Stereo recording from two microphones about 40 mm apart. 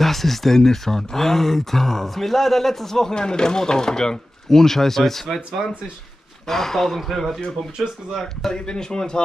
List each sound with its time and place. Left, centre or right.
0.0 s speech: centre
5.3 s speech: centre
6.4 s speech: centre
7.7 s speech: centre
8.2 s speech: centre
8.6 s speech: centre